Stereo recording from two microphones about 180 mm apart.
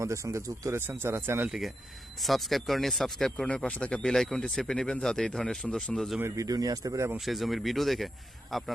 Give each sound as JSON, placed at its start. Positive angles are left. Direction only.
{"t": 0.0, "sound": "speech", "side_deg": -15}
{"t": 1.5, "sound": "speech", "side_deg": 0}
{"t": 6.1, "sound": "speech", "side_deg": -15}
{"t": 7.3, "sound": "speech", "side_deg": 0}